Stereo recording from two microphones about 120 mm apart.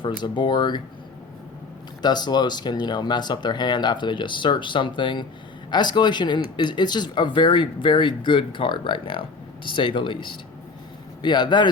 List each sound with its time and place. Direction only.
0.0 s speech: 40° left (ahead or behind)
2.0 s speech: 35° left (ahead or behind)